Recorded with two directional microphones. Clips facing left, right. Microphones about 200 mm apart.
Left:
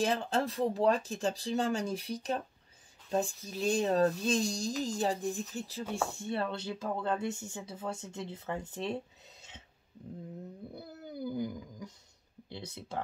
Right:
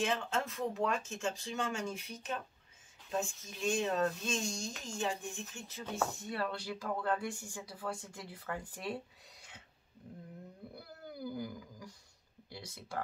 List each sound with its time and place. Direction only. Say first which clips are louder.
0.0 s speech: left 4 dB; 35° left (ahead or behind)
10.7 s a sound: left 5 dB; 20° left (ahead or behind)
12.4 s speech: left 4 dB; 25° left (ahead or behind)